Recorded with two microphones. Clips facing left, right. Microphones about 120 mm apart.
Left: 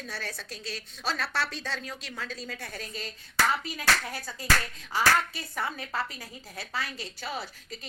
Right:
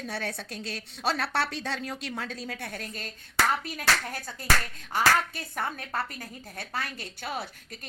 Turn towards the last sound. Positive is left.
turn(degrees=-55)  # may be behind; listen again after turning